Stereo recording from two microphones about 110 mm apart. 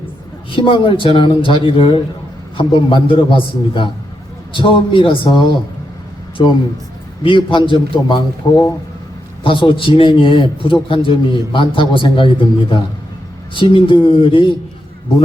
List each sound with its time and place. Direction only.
0.5 s a man's voice: 50° left (ahead or behind)